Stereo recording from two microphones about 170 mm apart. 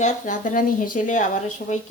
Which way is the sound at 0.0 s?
45° left (ahead or behind).